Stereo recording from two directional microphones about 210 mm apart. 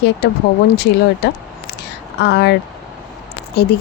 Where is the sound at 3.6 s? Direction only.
50° left (ahead or behind).